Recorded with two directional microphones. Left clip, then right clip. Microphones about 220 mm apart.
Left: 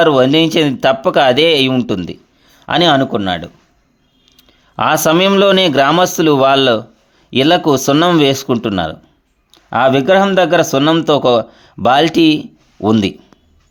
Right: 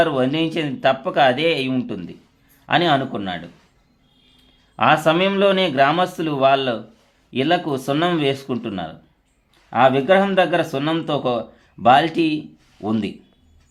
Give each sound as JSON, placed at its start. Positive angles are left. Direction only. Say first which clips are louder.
{"t": 0.0, "sound": "speech", "louder": "left 9 dB", "side_deg": 45}
{"t": 4.8, "sound": "speech", "louder": "left 4 dB", "side_deg": 45}